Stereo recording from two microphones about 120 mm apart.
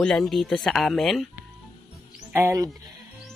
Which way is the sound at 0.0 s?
5° left (ahead or behind).